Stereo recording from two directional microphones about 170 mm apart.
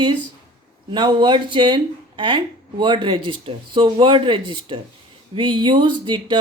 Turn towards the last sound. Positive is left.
turn(degrees=-25)  # may be behind; listen again after turning